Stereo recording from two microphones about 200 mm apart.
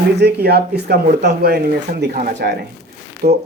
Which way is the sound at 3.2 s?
40° right (ahead or behind).